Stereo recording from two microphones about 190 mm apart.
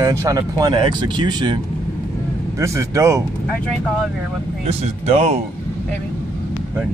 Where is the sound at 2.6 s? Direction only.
15° right (ahead or behind).